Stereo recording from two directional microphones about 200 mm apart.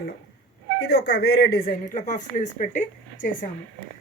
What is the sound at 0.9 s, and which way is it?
A woman's voice, 55° left (ahead or behind).